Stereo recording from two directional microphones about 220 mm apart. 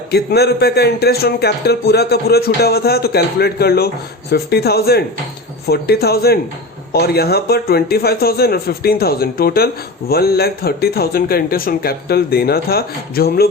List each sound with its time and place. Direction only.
0.1 s speech: 45° left (ahead or behind)